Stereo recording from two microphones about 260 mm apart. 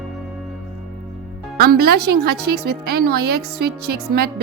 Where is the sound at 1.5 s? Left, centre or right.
Right.